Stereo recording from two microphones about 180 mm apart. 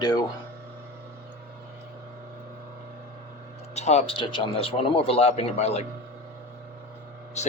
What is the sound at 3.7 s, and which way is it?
Speech, 40° left (ahead or behind).